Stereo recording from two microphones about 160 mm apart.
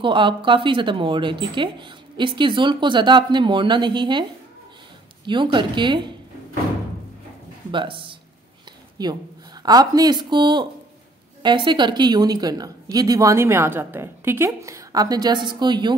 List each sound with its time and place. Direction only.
0.0 s a woman's voice: 30° right (ahead or behind)
7.7 s a woman's voice: 30° right (ahead or behind)